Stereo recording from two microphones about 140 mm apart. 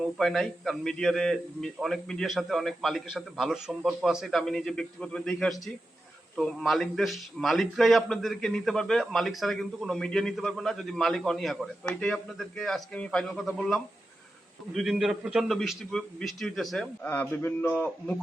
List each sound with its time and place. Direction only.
0.2 s a man's voice: centre (ahead or behind)